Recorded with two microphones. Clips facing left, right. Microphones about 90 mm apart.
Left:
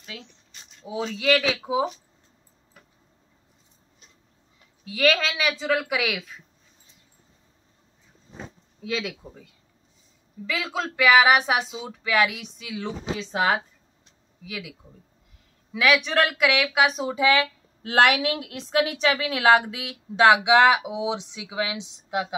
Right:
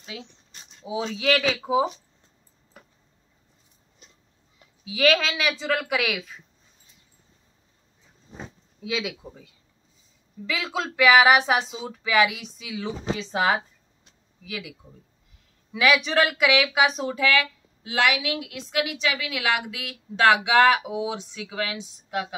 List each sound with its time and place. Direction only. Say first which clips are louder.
0.0 s speech: right 2 dB; 5° right (ahead or behind)
4.8 s speech: right 1 dB; centre (ahead or behind)
8.4 s speech: even; 5° right (ahead or behind)
17.1 s speech: left 2 dB; 25° left (ahead or behind)
17.8 s a woman's voice: left 4 dB; 50° left (ahead or behind)
19.8 s speech: left 2 dB; 20° left (ahead or behind)